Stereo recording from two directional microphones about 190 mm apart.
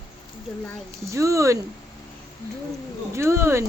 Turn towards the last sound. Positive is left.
turn(degrees=-15)  # may be behind; listen again after turning